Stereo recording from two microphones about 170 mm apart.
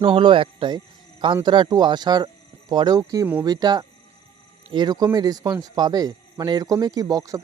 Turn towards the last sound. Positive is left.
turn(degrees=-20)  # may be behind; listen again after turning